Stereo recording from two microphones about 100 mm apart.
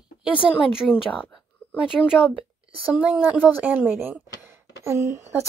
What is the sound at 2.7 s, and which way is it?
Speech, 15° right (ahead or behind).